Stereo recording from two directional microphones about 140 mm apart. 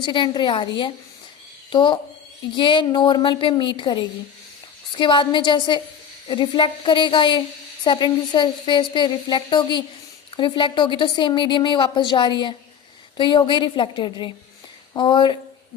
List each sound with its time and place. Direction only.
0.0 s a woman's voice: 35° left (ahead or behind)